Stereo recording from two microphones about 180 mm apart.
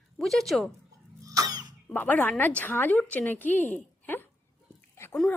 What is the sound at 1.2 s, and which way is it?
Cough, 20° right (ahead or behind).